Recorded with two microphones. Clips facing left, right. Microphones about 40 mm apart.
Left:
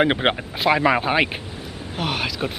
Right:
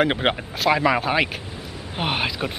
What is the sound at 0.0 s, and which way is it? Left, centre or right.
Speech, centre.